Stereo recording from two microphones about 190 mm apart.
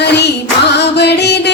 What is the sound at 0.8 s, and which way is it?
Music, 60° left (ahead or behind).